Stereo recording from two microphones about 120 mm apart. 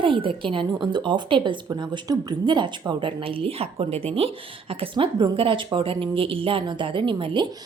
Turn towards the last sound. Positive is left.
turn(degrees=-45)  # may be behind; listen again after turning